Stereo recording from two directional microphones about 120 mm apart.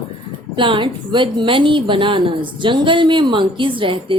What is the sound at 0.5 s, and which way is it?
A woman's voice, 45° right (ahead or behind).